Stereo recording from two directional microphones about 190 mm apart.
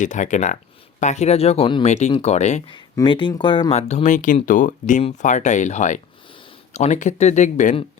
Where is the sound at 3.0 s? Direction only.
25° left (ahead or behind).